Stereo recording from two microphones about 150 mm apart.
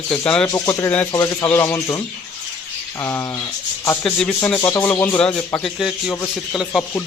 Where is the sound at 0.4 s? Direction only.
25° left (ahead or behind).